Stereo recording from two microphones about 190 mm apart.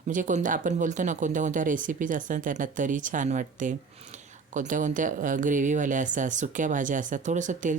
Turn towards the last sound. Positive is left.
turn(degrees=-40)  # may be behind; listen again after turning